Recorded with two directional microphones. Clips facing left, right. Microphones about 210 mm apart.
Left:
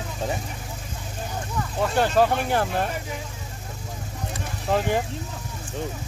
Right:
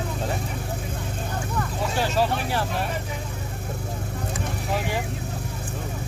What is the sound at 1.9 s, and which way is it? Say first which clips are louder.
Speech: left 4 dB; 55° left (ahead or behind).